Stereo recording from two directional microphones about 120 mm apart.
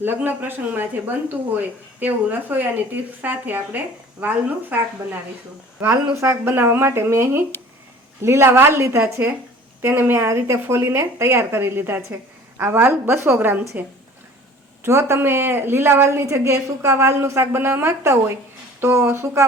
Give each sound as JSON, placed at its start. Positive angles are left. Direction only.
{"t": 0.0, "sound": "speech", "side_deg": -15}
{"t": 5.8, "sound": "a woman's voice", "side_deg": -20}
{"t": 14.8, "sound": "a woman's voice", "side_deg": -25}